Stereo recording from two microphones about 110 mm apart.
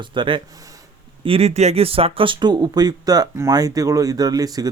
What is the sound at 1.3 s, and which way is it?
Speech, 65° right (ahead or behind).